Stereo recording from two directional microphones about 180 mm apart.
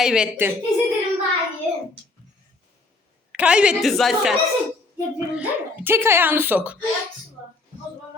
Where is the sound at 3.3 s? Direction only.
5° right (ahead or behind).